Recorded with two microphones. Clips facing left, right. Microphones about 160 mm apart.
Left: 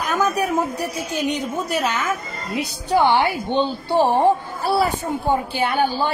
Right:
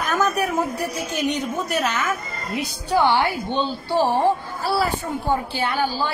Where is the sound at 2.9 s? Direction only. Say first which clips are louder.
Left 2 dB; 15° left (ahead or behind).